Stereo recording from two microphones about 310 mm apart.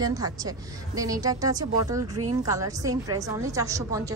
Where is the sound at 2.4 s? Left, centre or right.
Centre.